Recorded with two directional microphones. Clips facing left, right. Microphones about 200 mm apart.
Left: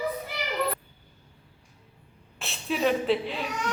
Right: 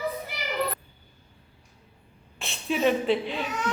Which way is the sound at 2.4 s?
Centre (ahead or behind).